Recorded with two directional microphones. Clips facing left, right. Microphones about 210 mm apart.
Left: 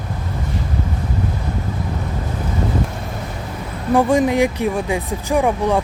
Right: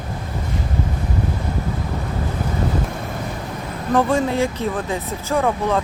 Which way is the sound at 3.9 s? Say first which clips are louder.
Left 3 dB; 15° left (ahead or behind).